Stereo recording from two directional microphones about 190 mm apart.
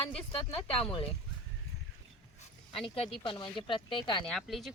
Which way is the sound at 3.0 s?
25° left (ahead or behind).